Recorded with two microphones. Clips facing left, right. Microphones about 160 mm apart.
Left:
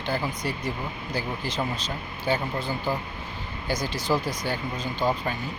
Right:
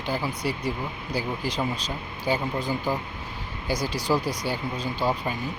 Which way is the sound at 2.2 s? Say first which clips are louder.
Right 1 dB; 10° right (ahead or behind).